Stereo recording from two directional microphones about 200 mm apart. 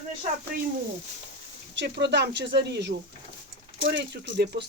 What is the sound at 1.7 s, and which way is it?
Speech, 60° right (ahead or behind).